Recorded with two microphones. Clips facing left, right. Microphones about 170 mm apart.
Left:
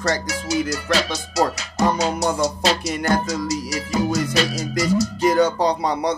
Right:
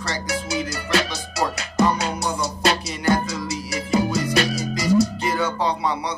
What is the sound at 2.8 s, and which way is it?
Music, 50° left (ahead or behind).